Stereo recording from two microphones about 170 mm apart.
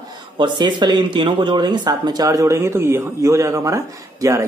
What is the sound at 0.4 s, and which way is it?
Speech, 25° right (ahead or behind).